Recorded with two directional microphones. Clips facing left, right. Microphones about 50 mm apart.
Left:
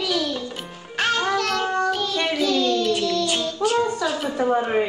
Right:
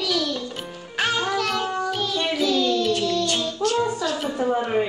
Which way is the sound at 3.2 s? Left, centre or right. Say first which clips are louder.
Left 1 dB; centre.